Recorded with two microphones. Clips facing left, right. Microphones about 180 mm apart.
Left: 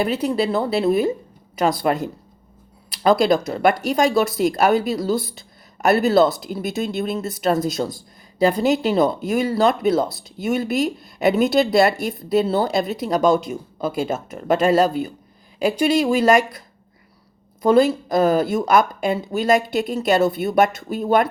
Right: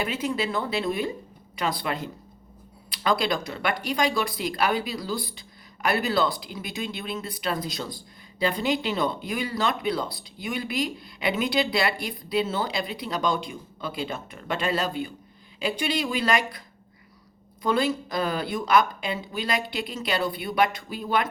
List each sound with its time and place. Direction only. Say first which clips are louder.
0.0 s speech: left 7 dB; 35° left (ahead or behind)
17.6 s speech: left 9 dB; 40° left (ahead or behind)